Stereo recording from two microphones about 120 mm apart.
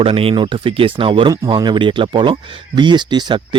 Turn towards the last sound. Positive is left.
turn(degrees=-40)  # may be behind; listen again after turning